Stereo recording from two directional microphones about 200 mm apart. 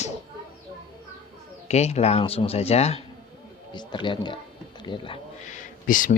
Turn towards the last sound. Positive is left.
turn(degrees=40)  # may be behind; listen again after turning